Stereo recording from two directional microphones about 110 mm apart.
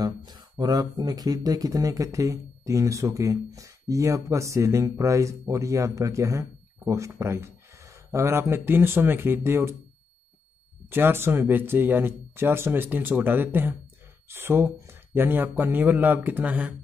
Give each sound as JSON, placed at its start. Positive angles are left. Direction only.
{"t": 0.0, "sound": "speech", "side_deg": -40}
{"t": 10.9, "sound": "speech", "side_deg": -20}